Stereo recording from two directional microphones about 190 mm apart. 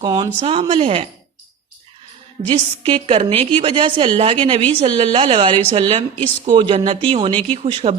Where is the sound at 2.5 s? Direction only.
30° right (ahead or behind).